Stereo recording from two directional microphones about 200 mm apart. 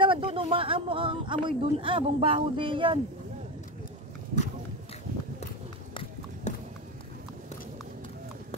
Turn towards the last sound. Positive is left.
turn(degrees=35)  # may be behind; listen again after turning